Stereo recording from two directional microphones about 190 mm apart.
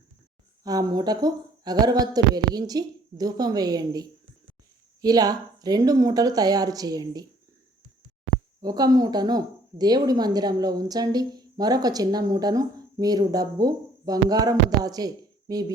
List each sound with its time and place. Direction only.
0.6 s speech: 20° right (ahead or behind)
8.6 s speech: 20° right (ahead or behind)